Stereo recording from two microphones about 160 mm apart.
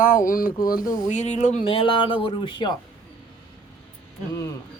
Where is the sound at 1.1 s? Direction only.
45° left (ahead or behind).